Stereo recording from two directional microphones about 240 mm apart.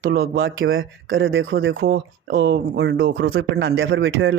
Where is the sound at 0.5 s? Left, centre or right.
Right.